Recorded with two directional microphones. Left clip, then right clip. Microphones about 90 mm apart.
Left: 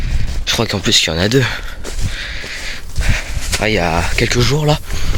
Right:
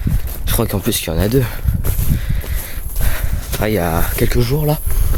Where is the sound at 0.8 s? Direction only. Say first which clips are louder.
Left 8 dB; 40° right (ahead or behind).